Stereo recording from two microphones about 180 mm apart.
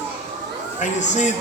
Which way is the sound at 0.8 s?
40° left (ahead or behind).